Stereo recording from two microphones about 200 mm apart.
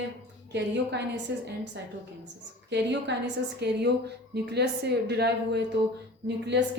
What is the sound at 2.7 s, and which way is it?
A woman's voice, 60° right (ahead or behind).